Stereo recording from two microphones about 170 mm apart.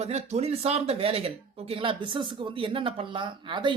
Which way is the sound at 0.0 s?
40° right (ahead or behind).